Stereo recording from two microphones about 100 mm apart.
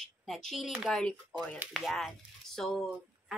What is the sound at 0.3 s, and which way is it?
A woman's voice, centre (ahead or behind).